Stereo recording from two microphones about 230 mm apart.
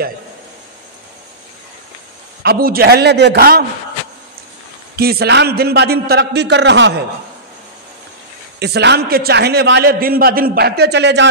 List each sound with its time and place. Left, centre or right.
2.4 s a man's voice: right
4.9 s a man's voice: right
8.5 s a man's voice: right